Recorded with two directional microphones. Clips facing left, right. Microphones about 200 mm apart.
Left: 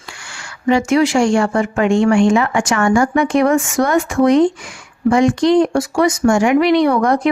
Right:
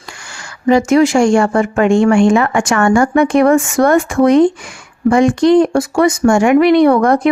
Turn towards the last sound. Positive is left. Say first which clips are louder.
# right 4 dB
turn(degrees=-55)  # may be behind; listen again after turning